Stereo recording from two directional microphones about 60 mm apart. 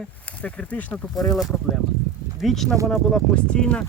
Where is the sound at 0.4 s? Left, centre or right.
Left.